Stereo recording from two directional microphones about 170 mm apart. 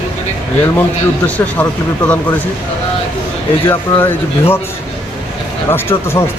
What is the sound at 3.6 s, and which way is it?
Speech, 15° left (ahead or behind).